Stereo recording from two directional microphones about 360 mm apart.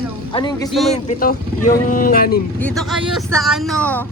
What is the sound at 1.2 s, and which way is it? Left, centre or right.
Speech, left.